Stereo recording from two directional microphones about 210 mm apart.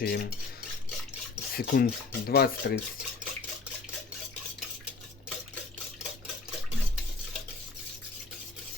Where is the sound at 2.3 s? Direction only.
50° left (ahead or behind).